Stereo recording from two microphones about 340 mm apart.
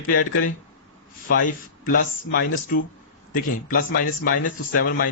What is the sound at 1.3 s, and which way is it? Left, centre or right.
Speech, left.